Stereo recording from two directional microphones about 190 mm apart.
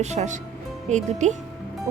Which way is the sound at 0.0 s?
35° right (ahead or behind).